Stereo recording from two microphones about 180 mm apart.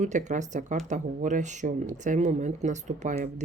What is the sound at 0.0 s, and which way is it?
Speech, 40° right (ahead or behind).